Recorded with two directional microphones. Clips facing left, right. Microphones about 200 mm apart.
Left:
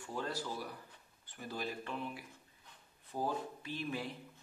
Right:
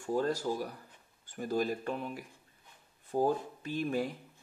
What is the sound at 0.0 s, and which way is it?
Speech, 45° right (ahead or behind).